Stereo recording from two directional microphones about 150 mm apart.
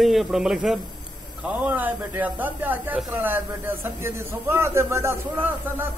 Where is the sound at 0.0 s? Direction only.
Centre (ahead or behind).